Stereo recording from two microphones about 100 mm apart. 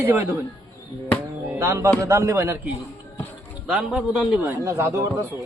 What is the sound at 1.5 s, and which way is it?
Music, 25° right (ahead or behind).